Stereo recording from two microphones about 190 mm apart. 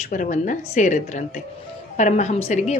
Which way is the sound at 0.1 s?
45° left (ahead or behind).